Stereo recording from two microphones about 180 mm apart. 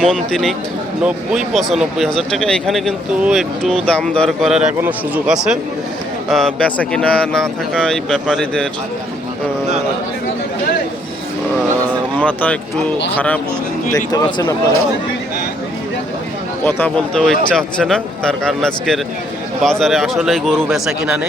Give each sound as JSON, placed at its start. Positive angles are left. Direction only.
{"t": 0.0, "sound": "speech", "side_deg": 5}
{"t": 12.1, "sound": "speech", "side_deg": 10}
{"t": 13.9, "sound": "speech", "side_deg": 20}
{"t": 16.6, "sound": "speech", "side_deg": 10}